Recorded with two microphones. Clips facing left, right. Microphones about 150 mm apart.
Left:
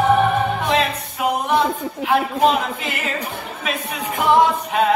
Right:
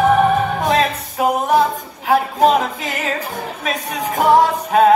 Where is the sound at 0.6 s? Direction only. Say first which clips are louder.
Right 3 dB; 40° right (ahead or behind).